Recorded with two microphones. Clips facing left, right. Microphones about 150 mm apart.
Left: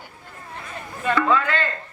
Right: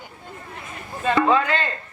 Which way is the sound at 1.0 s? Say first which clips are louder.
Right 2 dB; 25° right (ahead or behind).